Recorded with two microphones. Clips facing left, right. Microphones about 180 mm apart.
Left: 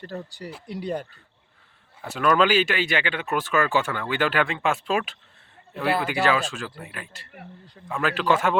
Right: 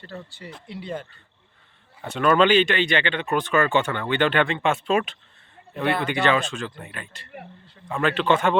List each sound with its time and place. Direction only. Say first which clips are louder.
0.7 s speech: left 3 dB; 40° left (ahead or behind)
2.0 s speech: right 2 dB; centre (ahead or behind)